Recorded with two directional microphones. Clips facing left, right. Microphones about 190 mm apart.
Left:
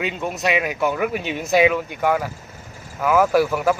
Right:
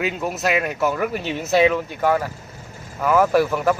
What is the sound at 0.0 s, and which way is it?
Speech, centre (ahead or behind).